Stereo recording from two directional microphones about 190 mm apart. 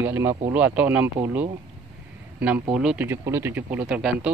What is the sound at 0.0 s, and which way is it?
Speech, 10° right (ahead or behind).